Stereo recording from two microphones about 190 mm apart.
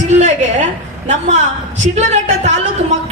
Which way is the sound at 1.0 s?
40° right (ahead or behind).